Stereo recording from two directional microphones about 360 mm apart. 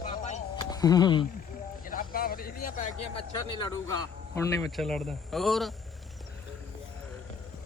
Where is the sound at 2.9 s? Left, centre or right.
Left.